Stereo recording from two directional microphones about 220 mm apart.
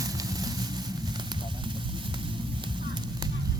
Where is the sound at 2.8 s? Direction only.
20° right (ahead or behind).